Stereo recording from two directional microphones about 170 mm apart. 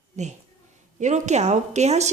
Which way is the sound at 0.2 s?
45° right (ahead or behind).